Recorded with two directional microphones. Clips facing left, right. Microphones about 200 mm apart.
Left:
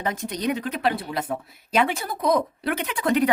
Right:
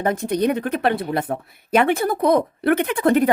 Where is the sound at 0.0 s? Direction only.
55° right (ahead or behind).